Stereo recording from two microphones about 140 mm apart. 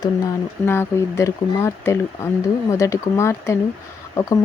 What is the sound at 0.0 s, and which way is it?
Speech, 20° left (ahead or behind).